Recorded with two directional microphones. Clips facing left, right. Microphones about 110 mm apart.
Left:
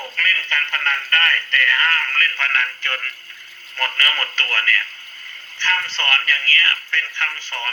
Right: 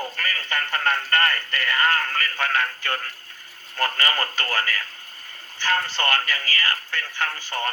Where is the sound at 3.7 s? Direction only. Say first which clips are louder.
Right 1 dB; 20° right (ahead or behind).